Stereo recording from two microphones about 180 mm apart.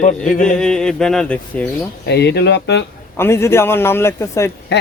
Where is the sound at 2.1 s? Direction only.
70° left (ahead or behind).